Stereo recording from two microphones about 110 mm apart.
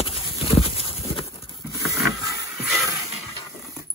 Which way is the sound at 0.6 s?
60° left (ahead or behind).